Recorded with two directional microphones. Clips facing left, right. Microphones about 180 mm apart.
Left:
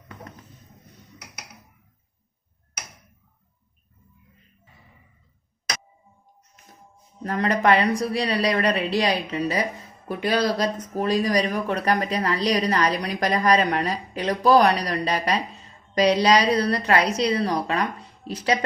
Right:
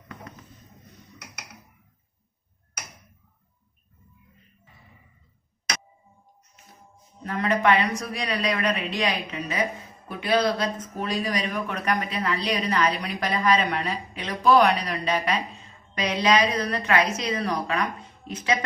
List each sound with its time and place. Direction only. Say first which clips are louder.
7.3 s speech: left 2 dB; 40° left (ahead or behind)